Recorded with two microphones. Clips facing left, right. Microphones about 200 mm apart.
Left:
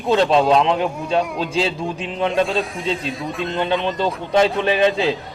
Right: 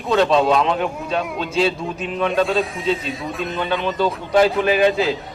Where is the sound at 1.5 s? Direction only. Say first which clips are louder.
Right 3 dB; 30° left (ahead or behind).